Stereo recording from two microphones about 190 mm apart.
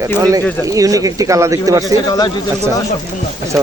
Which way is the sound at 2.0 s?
20° left (ahead or behind).